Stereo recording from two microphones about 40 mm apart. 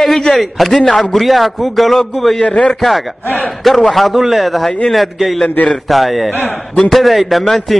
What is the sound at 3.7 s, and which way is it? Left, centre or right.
A man's voice, centre.